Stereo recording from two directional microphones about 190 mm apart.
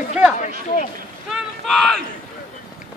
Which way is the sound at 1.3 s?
Centre (ahead or behind).